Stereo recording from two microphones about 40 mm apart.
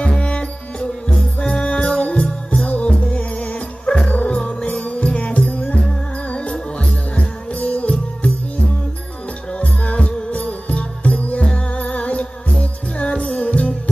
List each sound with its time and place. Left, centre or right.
0.0 s music: left
9.5 s music: left